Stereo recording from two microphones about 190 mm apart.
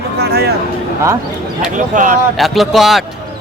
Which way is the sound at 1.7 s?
45° right (ahead or behind).